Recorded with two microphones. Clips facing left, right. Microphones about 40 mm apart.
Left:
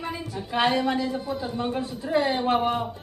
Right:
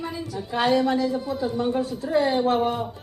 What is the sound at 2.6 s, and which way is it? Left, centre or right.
Speech, centre.